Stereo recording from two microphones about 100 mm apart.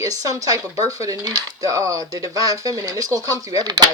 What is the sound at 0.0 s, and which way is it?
Speech, 35° right (ahead or behind).